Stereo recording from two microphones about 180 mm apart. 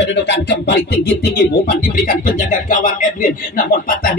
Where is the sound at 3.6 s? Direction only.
55° left (ahead or behind).